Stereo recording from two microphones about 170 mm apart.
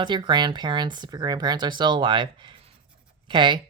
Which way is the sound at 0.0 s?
25° right (ahead or behind).